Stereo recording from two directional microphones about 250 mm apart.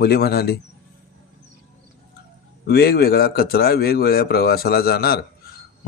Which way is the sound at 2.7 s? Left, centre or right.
Left.